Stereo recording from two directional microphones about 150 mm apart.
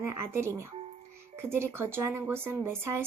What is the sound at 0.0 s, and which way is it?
Speech, 15° right (ahead or behind).